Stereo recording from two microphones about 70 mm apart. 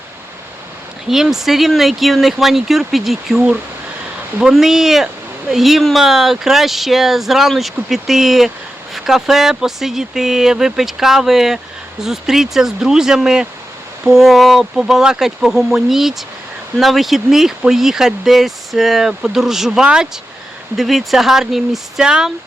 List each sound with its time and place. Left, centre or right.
1.0 s speech: centre